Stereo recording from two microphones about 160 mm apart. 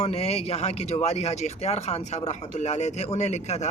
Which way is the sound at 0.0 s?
40° left (ahead or behind).